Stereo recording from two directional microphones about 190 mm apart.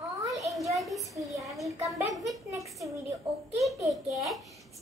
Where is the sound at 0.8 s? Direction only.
Centre (ahead or behind).